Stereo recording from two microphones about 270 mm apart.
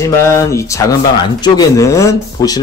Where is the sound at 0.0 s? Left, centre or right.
Centre.